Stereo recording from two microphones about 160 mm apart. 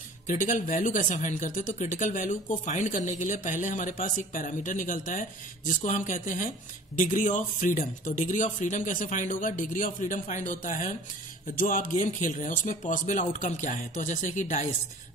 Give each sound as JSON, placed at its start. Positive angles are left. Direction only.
{"t": 0.3, "sound": "speech", "side_deg": 55}